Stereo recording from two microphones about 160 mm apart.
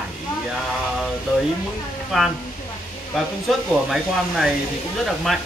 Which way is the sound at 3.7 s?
Centre (ahead or behind).